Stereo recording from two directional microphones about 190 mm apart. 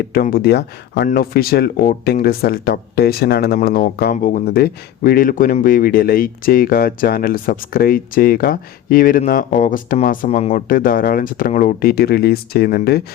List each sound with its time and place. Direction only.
0.0 s speech: 50° left (ahead or behind)